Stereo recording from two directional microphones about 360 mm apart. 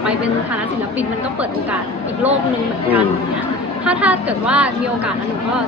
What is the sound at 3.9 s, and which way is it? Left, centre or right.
Speech, centre.